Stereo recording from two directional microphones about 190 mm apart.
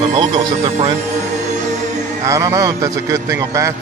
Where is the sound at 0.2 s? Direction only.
25° right (ahead or behind).